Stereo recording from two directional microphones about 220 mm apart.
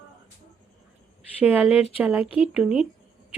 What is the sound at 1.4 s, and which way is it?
Speech, 5° right (ahead or behind).